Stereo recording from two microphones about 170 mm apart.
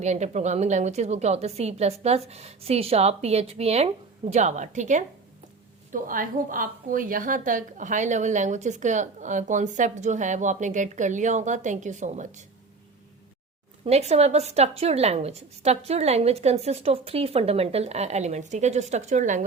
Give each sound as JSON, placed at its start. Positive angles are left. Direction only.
{"t": 0.0, "sound": "a woman's voice", "side_deg": -40}
{"t": 13.8, "sound": "a woman's voice", "side_deg": -40}